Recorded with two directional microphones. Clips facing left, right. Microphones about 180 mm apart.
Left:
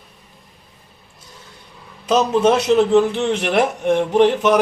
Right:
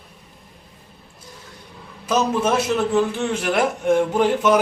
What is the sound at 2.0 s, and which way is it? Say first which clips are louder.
A man's voice: left 5 dB; 25° left (ahead or behind).